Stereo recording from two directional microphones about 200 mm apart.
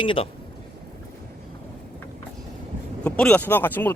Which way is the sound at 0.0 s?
25° left (ahead or behind).